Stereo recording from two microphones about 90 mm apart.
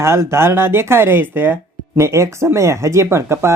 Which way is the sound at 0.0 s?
30° right (ahead or behind).